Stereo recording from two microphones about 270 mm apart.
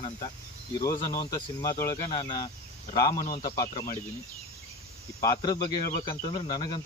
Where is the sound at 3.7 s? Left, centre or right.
Left.